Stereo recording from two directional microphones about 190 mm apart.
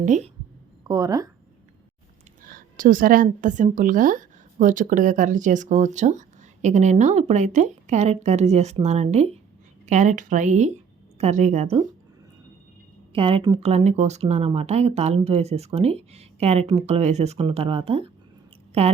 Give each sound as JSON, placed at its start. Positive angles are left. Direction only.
{"t": 0.0, "sound": "a woman's voice", "side_deg": -40}
{"t": 0.9, "sound": "speech", "side_deg": -20}
{"t": 2.4, "sound": "a woman's voice", "side_deg": -45}
{"t": 13.1, "sound": "a woman's voice", "side_deg": -30}